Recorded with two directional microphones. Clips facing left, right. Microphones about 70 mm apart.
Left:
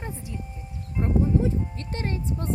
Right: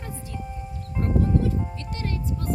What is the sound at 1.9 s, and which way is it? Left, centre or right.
Music, left.